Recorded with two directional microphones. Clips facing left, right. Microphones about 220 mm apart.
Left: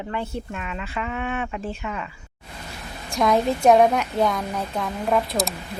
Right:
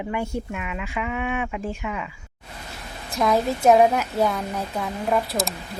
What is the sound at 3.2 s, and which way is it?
Speech, centre (ahead or behind).